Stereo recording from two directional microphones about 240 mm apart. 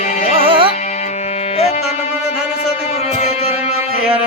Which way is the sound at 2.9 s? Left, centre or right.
Left.